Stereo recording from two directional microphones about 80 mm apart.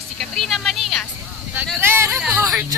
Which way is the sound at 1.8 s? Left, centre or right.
Right.